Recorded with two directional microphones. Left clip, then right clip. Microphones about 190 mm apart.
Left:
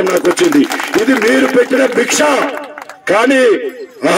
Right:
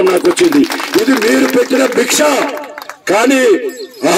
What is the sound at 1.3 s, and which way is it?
Speech, 45° right (ahead or behind).